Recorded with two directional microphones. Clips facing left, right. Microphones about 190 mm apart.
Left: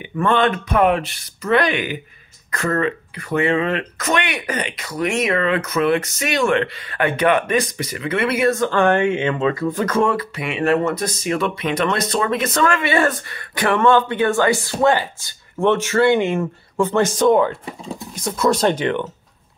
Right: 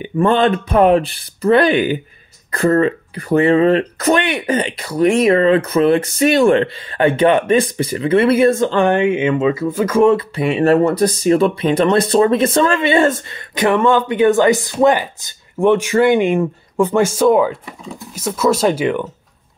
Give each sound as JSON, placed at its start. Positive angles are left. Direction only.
{"t": 0.0, "sound": "speech", "side_deg": -30}
{"t": 10.0, "sound": "speech", "side_deg": -30}